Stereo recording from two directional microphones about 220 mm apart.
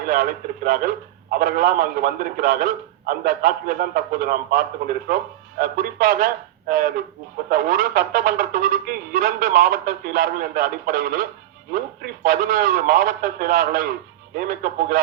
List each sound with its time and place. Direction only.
0.1 s speech: 40° right (ahead or behind)
12.2 s speech: 40° right (ahead or behind)